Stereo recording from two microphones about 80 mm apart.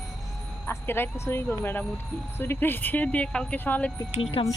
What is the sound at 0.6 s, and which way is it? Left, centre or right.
Speech, left.